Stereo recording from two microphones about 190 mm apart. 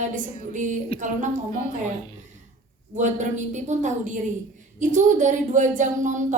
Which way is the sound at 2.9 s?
40° right (ahead or behind).